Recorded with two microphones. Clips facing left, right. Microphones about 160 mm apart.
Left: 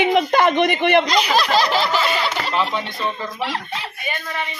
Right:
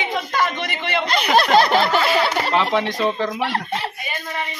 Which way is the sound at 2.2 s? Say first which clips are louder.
Right 2 dB; 55° right (ahead or behind).